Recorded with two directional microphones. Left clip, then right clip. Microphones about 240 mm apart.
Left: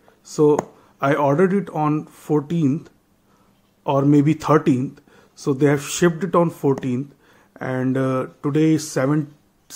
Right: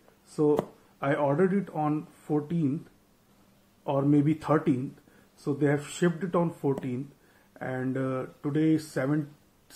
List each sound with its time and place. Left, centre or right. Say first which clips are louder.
0.9 s speech: left 9 dB; left
3.8 s speech: left 8 dB; left